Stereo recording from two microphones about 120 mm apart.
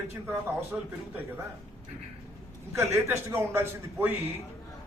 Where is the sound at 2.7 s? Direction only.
25° right (ahead or behind).